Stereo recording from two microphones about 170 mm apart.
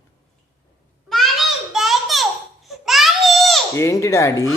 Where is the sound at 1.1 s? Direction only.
Centre (ahead or behind).